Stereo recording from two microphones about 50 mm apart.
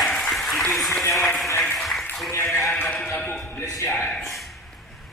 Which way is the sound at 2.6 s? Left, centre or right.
Left.